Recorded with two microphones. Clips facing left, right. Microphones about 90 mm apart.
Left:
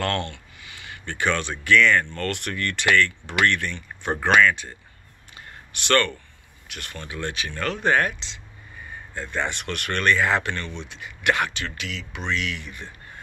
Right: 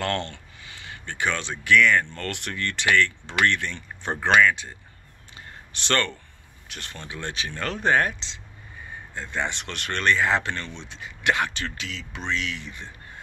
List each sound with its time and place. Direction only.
0.0 s speech: 20° right (ahead or behind)
0.3 s a sound: 30° right (ahead or behind)
1.0 s speech: 15° right (ahead or behind)
5.7 s speech: 30° right (ahead or behind)
9.1 s speech: 20° right (ahead or behind)